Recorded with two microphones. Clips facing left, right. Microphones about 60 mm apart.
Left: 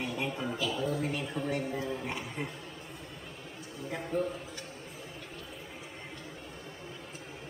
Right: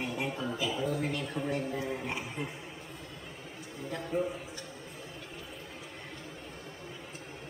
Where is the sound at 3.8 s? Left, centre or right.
Centre.